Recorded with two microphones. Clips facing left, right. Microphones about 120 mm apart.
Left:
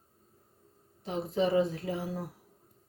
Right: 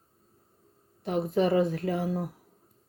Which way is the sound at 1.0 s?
60° right (ahead or behind).